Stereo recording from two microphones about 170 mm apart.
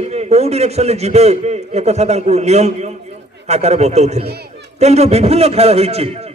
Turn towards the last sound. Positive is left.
turn(degrees=-40)  # may be behind; listen again after turning